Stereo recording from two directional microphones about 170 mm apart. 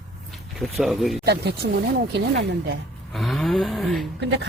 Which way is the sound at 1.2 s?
70° right (ahead or behind).